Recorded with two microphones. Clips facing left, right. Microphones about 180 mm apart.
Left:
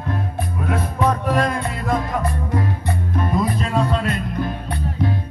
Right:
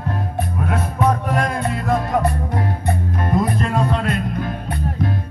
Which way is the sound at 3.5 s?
55° right (ahead or behind).